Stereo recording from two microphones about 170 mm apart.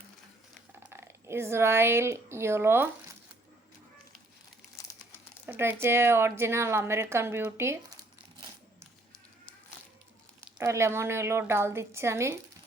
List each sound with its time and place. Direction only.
0.9 s speech: 15° right (ahead or behind)
5.5 s a woman's voice: 10° right (ahead or behind)
10.6 s a woman's voice: 15° right (ahead or behind)